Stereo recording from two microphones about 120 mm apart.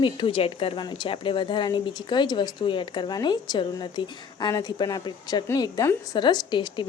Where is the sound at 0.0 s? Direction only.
45° left (ahead or behind).